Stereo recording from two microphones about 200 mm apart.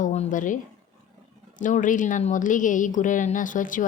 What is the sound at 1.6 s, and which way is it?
A woman's voice, 40° left (ahead or behind).